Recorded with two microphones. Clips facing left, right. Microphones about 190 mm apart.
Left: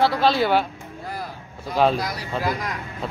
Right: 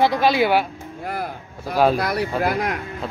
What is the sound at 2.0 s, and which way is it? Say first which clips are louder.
Speech: right 5 dB; 60° right (ahead or behind).